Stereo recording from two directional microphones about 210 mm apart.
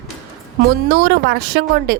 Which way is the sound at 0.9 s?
45° right (ahead or behind).